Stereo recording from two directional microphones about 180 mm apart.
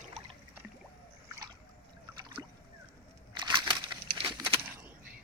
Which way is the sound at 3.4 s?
25° right (ahead or behind).